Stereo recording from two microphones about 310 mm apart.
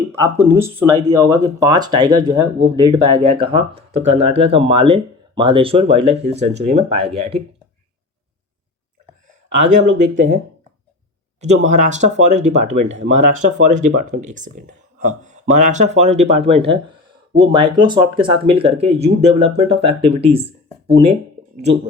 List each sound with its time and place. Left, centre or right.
0.1 s speech: centre
9.5 s speech: right